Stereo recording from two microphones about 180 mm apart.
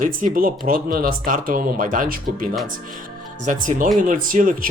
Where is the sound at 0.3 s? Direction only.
50° right (ahead or behind).